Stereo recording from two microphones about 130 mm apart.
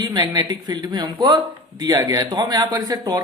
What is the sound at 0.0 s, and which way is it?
A man's voice, 30° right (ahead or behind).